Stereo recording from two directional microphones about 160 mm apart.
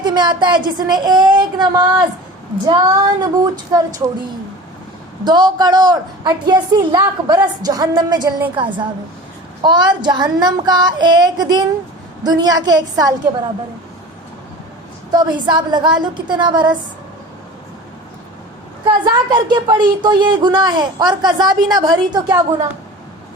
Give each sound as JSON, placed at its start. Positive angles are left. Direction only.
{"t": 0.0, "sound": "speech", "side_deg": -25}
{"t": 5.2, "sound": "a woman's voice", "side_deg": -25}
{"t": 15.1, "sound": "speech", "side_deg": -25}
{"t": 19.0, "sound": "speech", "side_deg": -25}